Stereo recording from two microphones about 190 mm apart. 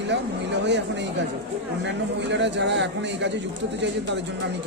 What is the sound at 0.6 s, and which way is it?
A man's voice, 65° right (ahead or behind).